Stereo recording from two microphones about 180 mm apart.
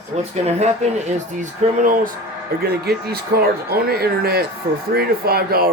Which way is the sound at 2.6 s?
60° right (ahead or behind).